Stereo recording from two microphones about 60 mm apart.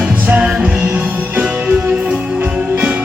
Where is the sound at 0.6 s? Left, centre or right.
Right.